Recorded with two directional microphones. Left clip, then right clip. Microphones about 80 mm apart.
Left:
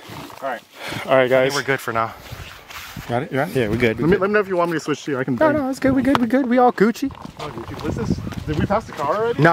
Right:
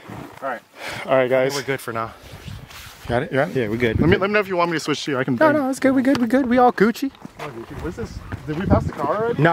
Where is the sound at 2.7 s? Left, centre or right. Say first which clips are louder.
Left 6 dB; left.